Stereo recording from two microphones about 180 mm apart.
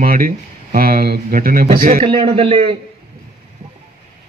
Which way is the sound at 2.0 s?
30° right (ahead or behind).